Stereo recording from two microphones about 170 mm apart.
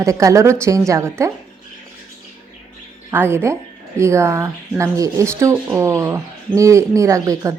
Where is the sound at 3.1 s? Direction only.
15° right (ahead or behind).